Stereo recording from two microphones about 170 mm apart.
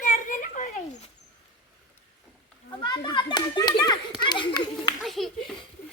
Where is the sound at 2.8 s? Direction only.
25° left (ahead or behind).